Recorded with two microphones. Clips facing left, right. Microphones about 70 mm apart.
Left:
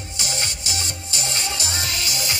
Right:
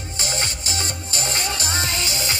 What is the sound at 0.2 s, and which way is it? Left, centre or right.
Music, right.